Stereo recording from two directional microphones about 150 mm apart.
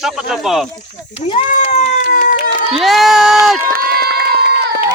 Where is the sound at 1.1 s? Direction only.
45° left (ahead or behind).